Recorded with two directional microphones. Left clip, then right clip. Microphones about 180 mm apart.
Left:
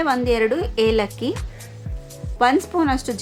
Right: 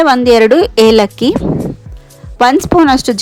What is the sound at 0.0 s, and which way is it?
A woman's voice, 40° right (ahead or behind).